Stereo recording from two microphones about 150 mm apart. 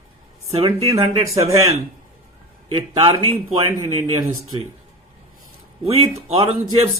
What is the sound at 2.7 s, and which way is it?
Speech, 35° right (ahead or behind).